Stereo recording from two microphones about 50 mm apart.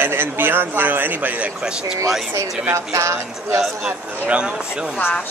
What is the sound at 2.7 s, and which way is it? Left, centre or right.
Speech, right.